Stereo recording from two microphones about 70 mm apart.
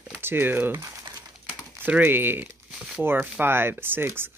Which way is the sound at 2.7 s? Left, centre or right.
Centre.